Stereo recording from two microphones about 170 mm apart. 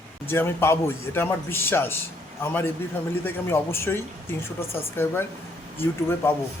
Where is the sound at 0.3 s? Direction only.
15° left (ahead or behind).